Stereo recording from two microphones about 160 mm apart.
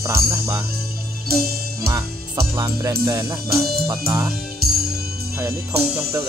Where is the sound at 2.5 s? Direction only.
20° right (ahead or behind).